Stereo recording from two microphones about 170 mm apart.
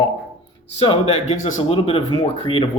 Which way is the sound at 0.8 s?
35° left (ahead or behind).